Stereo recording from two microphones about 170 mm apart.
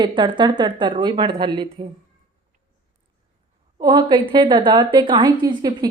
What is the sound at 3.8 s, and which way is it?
A woman's voice, 25° right (ahead or behind).